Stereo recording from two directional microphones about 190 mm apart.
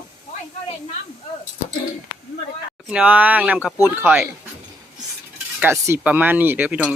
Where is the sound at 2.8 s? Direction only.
5° right (ahead or behind).